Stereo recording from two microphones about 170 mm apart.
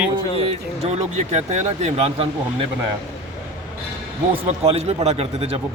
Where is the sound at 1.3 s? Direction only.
40° right (ahead or behind).